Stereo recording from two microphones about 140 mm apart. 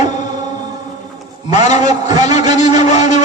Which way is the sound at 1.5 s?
55° left (ahead or behind).